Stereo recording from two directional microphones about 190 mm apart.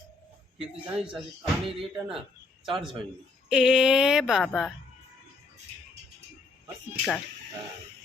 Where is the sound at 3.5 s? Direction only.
5° right (ahead or behind).